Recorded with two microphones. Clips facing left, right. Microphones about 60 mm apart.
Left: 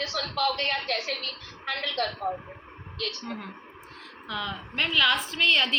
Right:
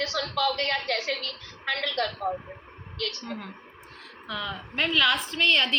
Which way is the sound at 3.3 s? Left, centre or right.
Centre.